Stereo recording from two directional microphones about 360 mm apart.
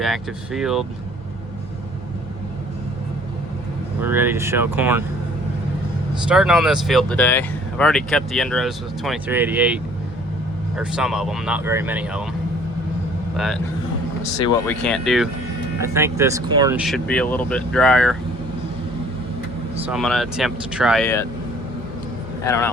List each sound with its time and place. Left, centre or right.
0.0 s speech: centre
4.0 s speech: centre
6.2 s speech: centre
13.3 s speech: centre
19.8 s speech: centre
22.4 s speech: centre